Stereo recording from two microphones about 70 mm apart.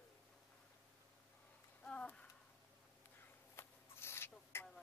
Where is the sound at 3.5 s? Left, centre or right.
Left.